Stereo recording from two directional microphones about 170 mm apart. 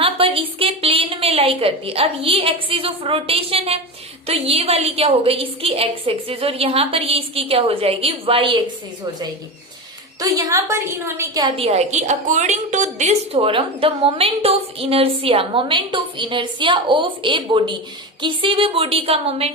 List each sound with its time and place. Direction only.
0.0 s a woman's voice: 35° right (ahead or behind)
10.2 s a woman's voice: 20° right (ahead or behind)
11.5 s a woman's voice: 35° right (ahead or behind)